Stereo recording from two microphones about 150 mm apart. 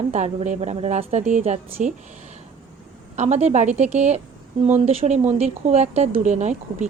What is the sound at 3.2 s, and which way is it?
Speech, 50° right (ahead or behind).